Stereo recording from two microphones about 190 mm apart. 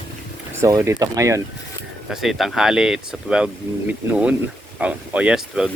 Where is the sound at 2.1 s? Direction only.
Centre (ahead or behind).